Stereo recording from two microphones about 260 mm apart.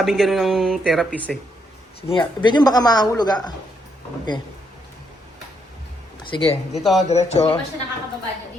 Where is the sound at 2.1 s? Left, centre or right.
Centre.